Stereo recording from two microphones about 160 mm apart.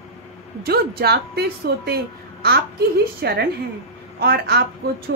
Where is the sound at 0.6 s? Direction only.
80° right.